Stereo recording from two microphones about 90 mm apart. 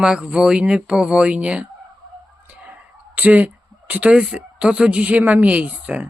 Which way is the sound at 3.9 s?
15° right (ahead or behind).